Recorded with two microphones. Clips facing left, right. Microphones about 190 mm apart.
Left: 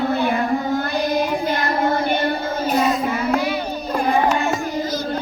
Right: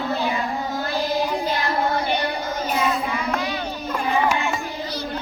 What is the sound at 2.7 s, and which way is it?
Child singing, 35° left (ahead or behind).